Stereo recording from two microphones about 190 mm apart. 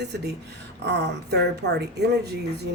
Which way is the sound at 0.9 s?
65° right (ahead or behind).